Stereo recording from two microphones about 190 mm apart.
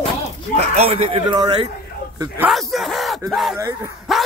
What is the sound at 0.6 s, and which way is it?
A man's voice, 35° right (ahead or behind).